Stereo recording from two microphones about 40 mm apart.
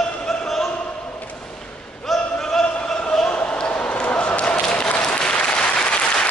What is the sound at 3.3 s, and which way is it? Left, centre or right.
Basketball bounce, left.